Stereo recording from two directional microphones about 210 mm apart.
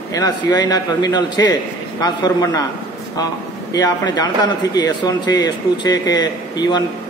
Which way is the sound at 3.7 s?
20° left (ahead or behind).